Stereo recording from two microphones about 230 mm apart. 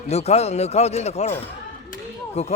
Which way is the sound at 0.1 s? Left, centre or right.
Left.